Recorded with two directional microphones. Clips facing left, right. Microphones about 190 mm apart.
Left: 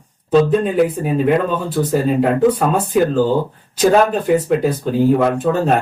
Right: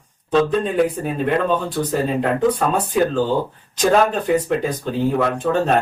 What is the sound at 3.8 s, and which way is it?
Speech, 5° left (ahead or behind).